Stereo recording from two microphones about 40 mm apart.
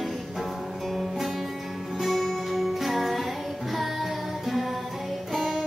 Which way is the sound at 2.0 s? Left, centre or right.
Centre.